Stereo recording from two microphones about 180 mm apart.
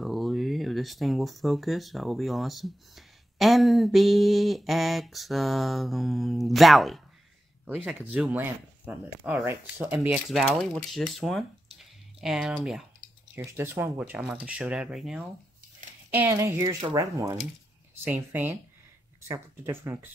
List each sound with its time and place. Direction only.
0.0 s speech: centre (ahead or behind)
13.3 s speech: 10° right (ahead or behind)